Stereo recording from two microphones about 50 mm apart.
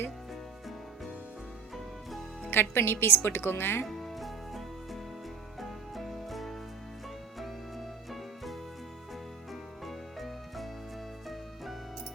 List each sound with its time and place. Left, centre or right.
1.7 s music: centre
2.5 s speech: left
3.8 s music: centre